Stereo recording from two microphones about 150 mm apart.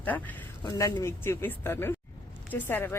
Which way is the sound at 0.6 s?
25° left (ahead or behind).